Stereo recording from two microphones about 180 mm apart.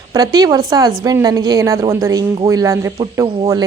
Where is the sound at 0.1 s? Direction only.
20° right (ahead or behind).